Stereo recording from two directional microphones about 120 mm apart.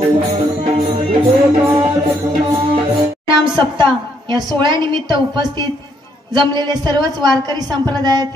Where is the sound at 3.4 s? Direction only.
40° right (ahead or behind).